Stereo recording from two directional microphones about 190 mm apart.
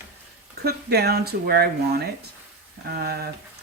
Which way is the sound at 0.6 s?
55° right (ahead or behind).